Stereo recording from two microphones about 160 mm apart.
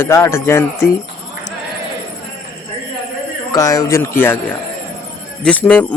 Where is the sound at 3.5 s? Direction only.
20° left (ahead or behind).